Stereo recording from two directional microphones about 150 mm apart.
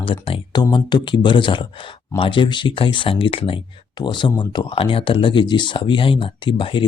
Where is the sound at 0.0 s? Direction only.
35° left (ahead or behind).